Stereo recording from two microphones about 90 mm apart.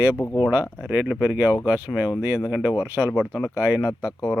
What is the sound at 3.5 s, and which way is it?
Speech, 25° right (ahead or behind).